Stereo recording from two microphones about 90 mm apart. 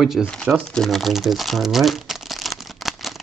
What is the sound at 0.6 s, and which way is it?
Crumpling, 5° left (ahead or behind).